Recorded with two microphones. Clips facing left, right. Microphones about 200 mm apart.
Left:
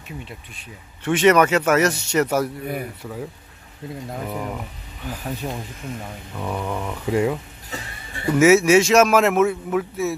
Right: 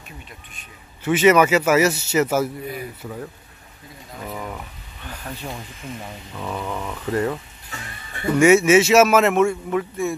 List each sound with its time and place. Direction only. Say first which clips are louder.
1.0 s a man's voice: right 1 dB; 5° right (ahead or behind)
5.0 s speech: left 4 dB; 5° left (ahead or behind)
8.4 s a man's voice: even; centre (ahead or behind)